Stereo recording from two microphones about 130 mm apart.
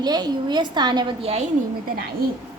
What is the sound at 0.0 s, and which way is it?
A woman's voice, 35° right (ahead or behind).